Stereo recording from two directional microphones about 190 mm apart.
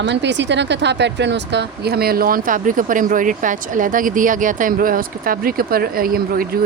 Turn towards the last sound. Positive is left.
turn(degrees=-50)  # may be behind; listen again after turning